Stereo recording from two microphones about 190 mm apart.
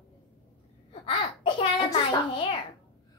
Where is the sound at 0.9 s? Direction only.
30° left (ahead or behind).